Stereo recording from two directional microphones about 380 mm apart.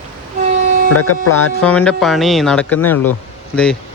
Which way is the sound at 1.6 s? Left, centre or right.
Centre.